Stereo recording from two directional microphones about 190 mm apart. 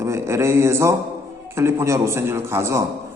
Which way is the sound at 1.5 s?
15° right (ahead or behind).